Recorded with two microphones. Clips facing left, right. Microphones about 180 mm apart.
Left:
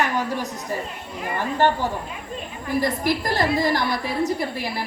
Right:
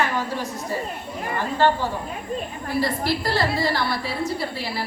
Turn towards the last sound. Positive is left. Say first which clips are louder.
# left 2 dB
turn(degrees=15)  # may be behind; listen again after turning